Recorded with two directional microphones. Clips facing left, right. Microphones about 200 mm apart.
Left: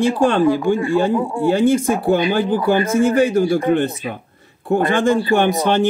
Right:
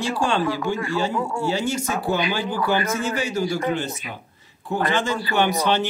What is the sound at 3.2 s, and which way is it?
Speech, 55° left (ahead or behind).